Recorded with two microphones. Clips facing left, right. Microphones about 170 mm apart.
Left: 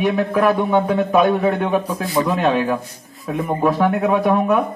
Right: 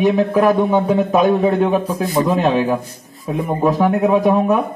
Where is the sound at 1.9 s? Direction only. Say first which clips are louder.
Right 2 dB; 45° right (ahead or behind).